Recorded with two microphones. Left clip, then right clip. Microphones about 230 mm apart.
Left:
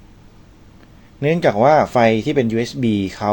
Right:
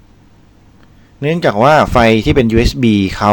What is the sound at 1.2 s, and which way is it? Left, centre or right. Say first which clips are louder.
Speech: right 3 dB; centre.